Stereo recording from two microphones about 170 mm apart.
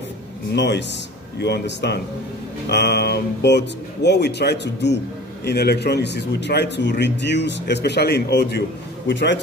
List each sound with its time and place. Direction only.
0.5 s speech: 85° left